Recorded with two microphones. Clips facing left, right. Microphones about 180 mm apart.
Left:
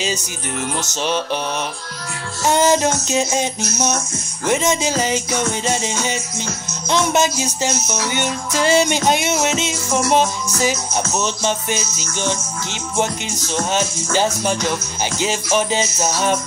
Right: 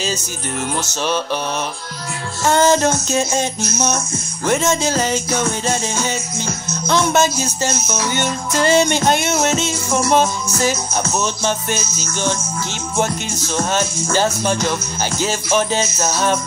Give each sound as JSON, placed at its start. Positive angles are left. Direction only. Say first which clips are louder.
{"t": 2.4, "sound": "music", "louder": "right 1 dB", "side_deg": 15}
{"t": 4.5, "sound": "music", "louder": "right 1 dB", "side_deg": 10}
{"t": 14.1, "sound": "music", "louder": "right 1 dB", "side_deg": 10}